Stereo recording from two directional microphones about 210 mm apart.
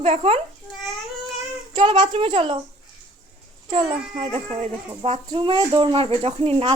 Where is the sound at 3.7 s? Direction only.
25° right (ahead or behind).